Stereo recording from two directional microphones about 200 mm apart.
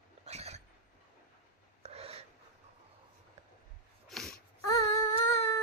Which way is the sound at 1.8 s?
30° right (ahead or behind).